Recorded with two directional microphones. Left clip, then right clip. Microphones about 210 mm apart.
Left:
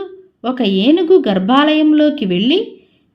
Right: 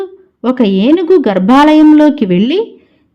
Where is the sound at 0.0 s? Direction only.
30° right (ahead or behind).